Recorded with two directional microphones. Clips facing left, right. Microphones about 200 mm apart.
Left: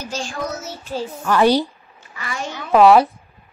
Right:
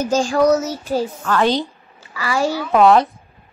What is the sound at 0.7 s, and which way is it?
Child singing, 40° right (ahead or behind).